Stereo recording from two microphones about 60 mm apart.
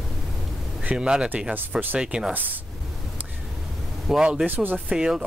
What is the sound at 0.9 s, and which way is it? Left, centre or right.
Speech, centre.